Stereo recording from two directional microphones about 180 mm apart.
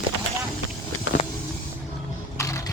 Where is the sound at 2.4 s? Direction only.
15° left (ahead or behind).